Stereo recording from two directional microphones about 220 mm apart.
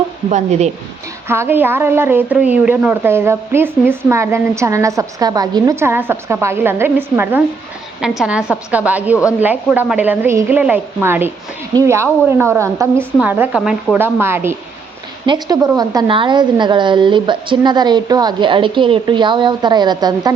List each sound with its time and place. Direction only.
0.3 s speech: 30° right (ahead or behind)
1.3 s a woman's voice: 10° right (ahead or behind)